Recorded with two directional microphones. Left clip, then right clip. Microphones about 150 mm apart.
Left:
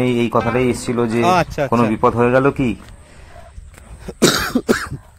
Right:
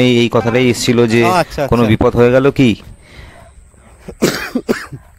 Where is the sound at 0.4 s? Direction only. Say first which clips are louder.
Right 4 dB; 90° right.